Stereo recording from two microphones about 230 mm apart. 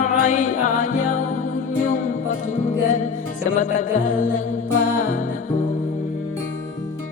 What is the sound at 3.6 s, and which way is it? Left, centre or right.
Music, left.